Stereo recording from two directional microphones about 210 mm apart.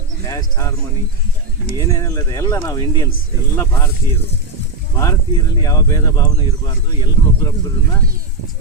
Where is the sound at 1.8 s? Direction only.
15° left (ahead or behind).